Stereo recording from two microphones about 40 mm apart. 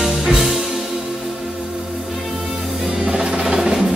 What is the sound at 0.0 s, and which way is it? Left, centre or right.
Music, centre.